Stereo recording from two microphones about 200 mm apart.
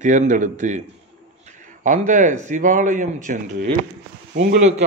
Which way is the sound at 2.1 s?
40° right (ahead or behind).